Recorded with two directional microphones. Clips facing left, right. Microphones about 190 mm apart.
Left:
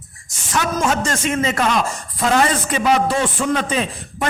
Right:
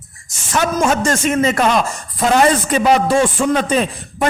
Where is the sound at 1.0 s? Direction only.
45° right (ahead or behind).